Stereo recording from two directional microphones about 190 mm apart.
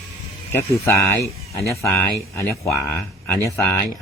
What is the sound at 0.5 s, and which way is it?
Speech, 10° left (ahead or behind).